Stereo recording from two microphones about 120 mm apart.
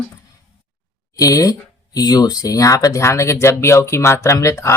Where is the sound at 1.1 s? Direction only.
30° left (ahead or behind).